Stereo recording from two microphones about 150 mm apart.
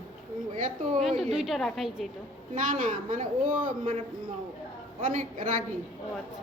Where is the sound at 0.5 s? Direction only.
50° right (ahead or behind).